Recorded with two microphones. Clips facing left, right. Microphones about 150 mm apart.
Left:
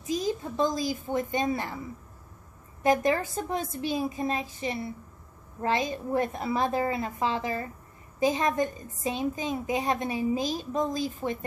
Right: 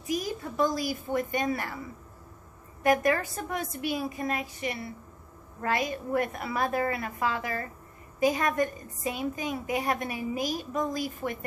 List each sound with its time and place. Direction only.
0.0 s a woman's voice: 20° left (ahead or behind)
2.8 s a woman's voice: 25° left (ahead or behind)